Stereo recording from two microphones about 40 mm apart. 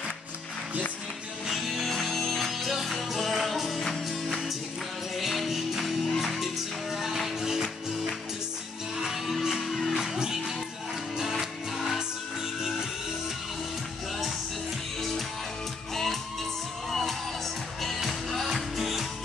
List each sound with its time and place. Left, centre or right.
1.5 s music: centre
1.9 s music: centre
5.1 s music: centre
15.0 s music: centre
17.8 s music: centre